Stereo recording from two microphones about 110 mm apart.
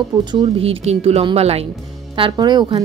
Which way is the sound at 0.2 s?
50° right (ahead or behind).